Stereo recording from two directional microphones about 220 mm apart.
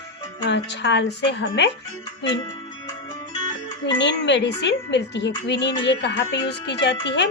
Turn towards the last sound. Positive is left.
turn(degrees=50)  # may be behind; listen again after turning